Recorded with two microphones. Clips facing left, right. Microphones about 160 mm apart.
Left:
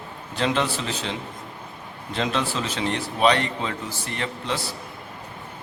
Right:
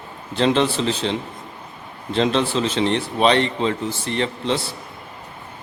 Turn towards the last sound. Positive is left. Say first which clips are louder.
# right 5 dB
turn(degrees=-30)  # may be behind; listen again after turning